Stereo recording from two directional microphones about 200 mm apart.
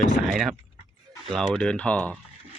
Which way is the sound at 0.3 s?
Centre (ahead or behind).